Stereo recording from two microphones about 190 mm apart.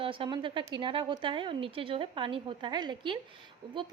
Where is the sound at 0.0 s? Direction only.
25° right (ahead or behind).